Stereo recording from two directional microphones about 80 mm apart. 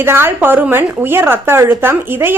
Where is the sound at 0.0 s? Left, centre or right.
Right.